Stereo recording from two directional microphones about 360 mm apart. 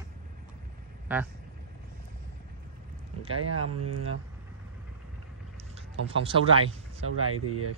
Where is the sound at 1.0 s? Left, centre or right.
Centre.